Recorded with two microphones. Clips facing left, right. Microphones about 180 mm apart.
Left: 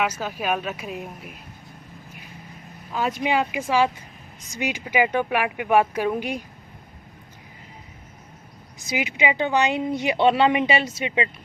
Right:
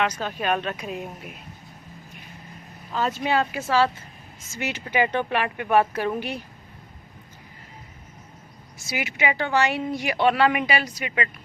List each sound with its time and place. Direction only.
0.0 s a woman's voice: 5° left (ahead or behind)
2.9 s speech: 10° left (ahead or behind)
8.9 s a woman's voice: 20° left (ahead or behind)